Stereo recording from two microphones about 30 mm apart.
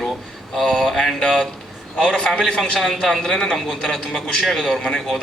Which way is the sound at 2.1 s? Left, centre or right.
Left.